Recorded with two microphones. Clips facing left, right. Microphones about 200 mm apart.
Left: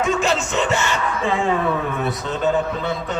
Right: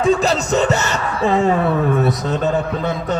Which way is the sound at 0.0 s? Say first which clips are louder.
Right 4 dB; 35° right (ahead or behind).